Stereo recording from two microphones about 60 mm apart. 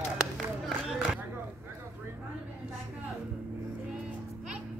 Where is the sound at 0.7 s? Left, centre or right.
Centre.